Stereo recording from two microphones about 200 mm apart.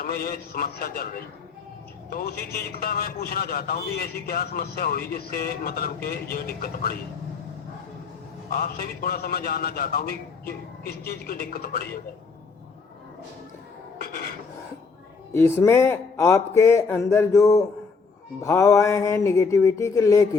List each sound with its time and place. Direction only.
0.0 s a man's voice: 45° left (ahead or behind)
2.0 s a man's voice: 50° left (ahead or behind)
8.4 s a man's voice: 45° left (ahead or behind)
14.0 s a sound: 50° left (ahead or behind)
15.3 s speech: 15° left (ahead or behind)